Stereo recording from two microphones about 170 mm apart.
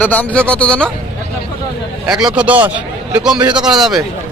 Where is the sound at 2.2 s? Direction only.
5° right (ahead or behind).